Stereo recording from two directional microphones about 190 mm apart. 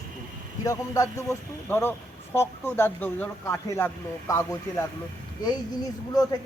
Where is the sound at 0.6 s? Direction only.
15° left (ahead or behind).